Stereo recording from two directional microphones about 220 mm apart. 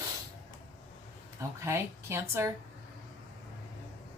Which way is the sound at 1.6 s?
10° right (ahead or behind).